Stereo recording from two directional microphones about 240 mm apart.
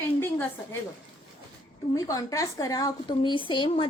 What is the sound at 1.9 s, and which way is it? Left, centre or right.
Speech, centre.